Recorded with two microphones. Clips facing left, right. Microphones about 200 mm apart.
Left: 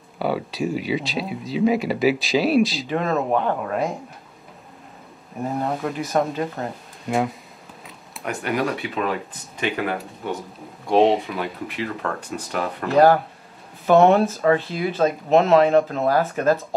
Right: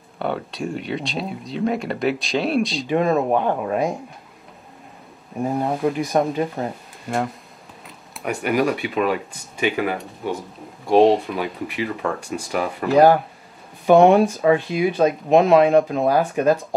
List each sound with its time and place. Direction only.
0.2 s speech: 5° left (ahead or behind)
2.9 s speech: 15° right (ahead or behind)
5.6 s speech: 5° right (ahead or behind)
7.1 s speech: centre (ahead or behind); by 16.5 s 15° right (ahead or behind)